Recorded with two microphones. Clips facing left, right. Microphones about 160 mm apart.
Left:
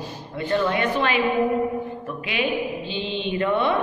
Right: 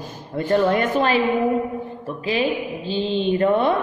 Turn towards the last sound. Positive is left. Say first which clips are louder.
# right 4 dB
turn(degrees=-40)  # may be behind; listen again after turning